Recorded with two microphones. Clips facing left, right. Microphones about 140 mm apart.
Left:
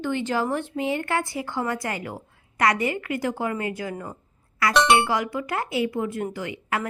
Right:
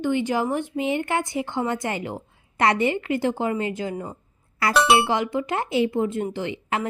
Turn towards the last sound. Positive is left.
turn(degrees=-25)  # may be behind; listen again after turning